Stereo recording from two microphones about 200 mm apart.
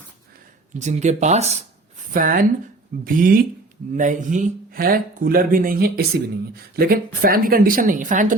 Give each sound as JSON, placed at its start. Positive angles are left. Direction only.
{"t": 0.8, "sound": "speech", "side_deg": -35}
{"t": 2.1, "sound": "speech", "side_deg": -45}